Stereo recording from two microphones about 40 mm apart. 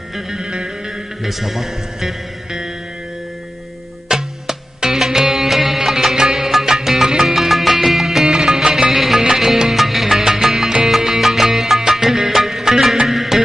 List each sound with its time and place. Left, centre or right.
0.2 s music: centre
1.2 s speech: centre
4.1 s music: centre